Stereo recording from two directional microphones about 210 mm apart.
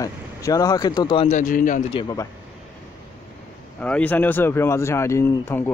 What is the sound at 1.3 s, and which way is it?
Speech, 40° left (ahead or behind).